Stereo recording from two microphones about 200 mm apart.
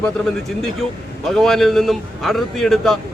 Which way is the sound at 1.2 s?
Centre (ahead or behind).